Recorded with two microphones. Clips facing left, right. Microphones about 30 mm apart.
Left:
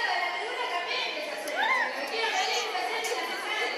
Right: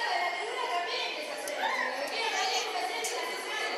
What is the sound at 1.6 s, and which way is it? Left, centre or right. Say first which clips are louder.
Chatter: left 5 dB; centre.